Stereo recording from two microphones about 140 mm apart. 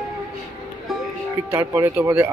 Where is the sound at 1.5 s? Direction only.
20° right (ahead or behind).